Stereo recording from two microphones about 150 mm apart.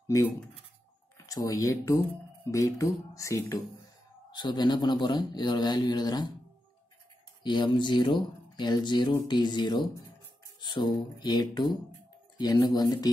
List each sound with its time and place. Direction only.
1.1 s a man's voice: 25° left (ahead or behind)
7.4 s a man's voice: 30° left (ahead or behind)